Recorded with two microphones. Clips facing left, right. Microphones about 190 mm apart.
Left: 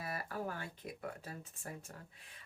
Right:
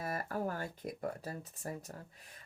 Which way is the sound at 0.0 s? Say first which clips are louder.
Right 4 dB; 45° right (ahead or behind).